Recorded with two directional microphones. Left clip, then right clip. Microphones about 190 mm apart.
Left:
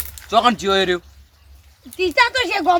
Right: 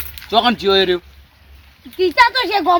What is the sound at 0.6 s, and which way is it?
Speech, 30° left (ahead or behind).